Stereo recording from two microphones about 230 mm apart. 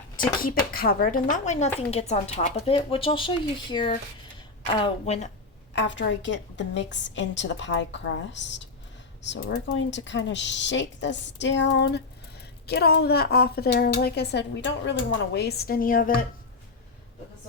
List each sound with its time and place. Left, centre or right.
0.2 s speech: left
5.7 s a woman's voice: left